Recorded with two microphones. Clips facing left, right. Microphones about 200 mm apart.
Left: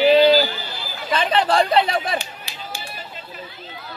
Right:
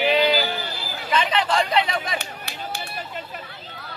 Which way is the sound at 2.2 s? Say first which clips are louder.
Right 2 dB; 60° right (ahead or behind).